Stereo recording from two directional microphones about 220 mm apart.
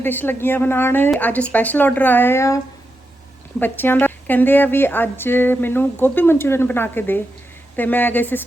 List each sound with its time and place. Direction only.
0.0 s a woman's voice: 10° left (ahead or behind)
3.6 s a woman's voice: 10° left (ahead or behind)